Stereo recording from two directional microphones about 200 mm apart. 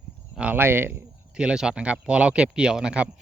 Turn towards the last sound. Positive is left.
turn(degrees=-5)  # may be behind; listen again after turning